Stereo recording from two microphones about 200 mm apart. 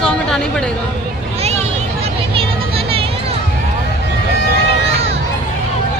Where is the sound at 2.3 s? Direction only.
30° right (ahead or behind).